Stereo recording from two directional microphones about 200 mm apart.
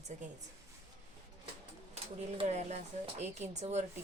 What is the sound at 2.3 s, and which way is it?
Speech, 35° right (ahead or behind).